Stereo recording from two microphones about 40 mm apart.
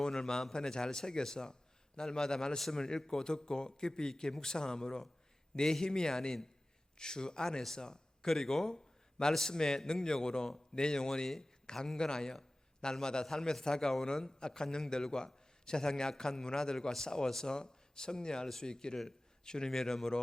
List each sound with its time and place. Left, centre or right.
0.0 s a man's voice: centre
2.6 s a man's voice: centre